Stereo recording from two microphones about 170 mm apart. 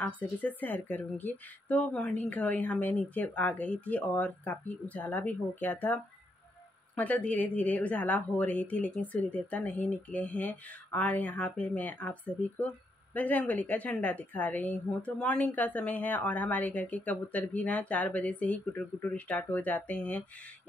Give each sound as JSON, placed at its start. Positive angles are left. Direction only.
{"t": 0.0, "sound": "speech", "side_deg": 10}
{"t": 7.0, "sound": "speech", "side_deg": 10}